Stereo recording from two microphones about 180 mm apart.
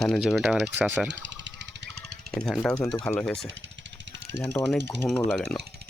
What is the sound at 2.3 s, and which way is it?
Speech, centre (ahead or behind).